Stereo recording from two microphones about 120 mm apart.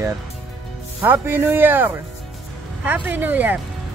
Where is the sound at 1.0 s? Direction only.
15° right (ahead or behind).